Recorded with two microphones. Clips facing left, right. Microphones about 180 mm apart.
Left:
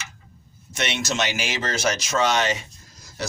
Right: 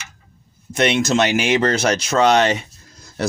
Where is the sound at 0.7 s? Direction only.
55° right (ahead or behind).